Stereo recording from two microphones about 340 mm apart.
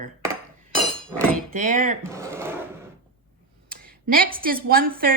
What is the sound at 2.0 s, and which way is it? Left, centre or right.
Speech, centre.